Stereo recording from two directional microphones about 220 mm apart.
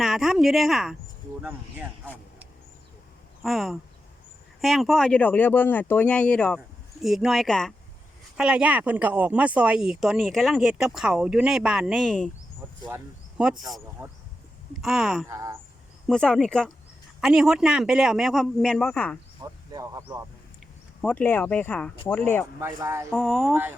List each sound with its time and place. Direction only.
0.0 s speech: centre (ahead or behind)
3.4 s speech: centre (ahead or behind)
13.3 s speech: 5° right (ahead or behind)
15.3 s speech: 15° right (ahead or behind)
16.0 s speech: 5° left (ahead or behind)
19.4 s speech: 15° right (ahead or behind)
21.0 s speech: 5° left (ahead or behind)
22.6 s speech: 15° right (ahead or behind)
23.1 s speech: centre (ahead or behind)